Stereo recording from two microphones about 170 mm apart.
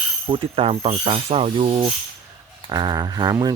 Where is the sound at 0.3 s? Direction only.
35° right (ahead or behind).